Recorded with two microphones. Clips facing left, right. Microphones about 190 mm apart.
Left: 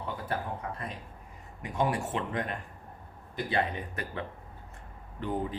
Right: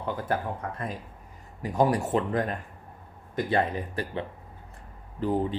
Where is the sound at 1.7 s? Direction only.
40° right (ahead or behind).